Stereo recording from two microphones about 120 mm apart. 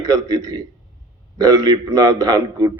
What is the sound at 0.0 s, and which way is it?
A man's voice, 30° right (ahead or behind).